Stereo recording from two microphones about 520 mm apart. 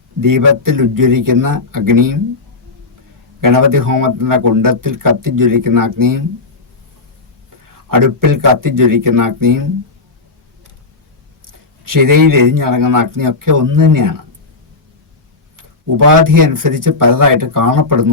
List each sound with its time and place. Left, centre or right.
0.2 s speech: right
3.4 s speech: right
7.9 s speech: right
11.4 s speech: right
16.0 s speech: right